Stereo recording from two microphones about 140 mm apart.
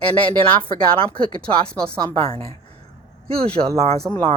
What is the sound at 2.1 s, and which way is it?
Speech, 45° right (ahead or behind).